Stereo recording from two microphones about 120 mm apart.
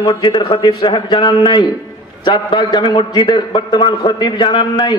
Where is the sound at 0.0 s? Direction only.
40° left (ahead or behind).